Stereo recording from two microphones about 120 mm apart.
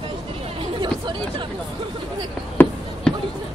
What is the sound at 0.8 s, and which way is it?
Chatter, 40° right (ahead or behind).